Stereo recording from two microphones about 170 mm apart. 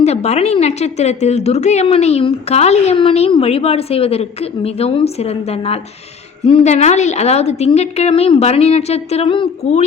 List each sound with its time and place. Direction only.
0.0 s speech: 40° left (ahead or behind)